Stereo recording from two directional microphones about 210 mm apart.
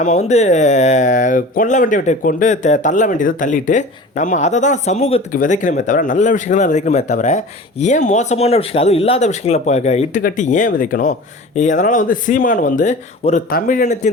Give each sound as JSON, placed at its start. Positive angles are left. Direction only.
{"t": 0.0, "sound": "speech", "side_deg": 35}